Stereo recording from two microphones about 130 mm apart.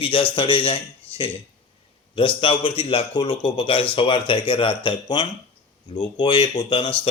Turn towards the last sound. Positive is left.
turn(degrees=40)  # may be behind; listen again after turning